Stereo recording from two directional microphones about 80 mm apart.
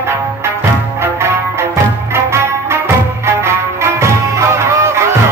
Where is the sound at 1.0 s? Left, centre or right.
Right.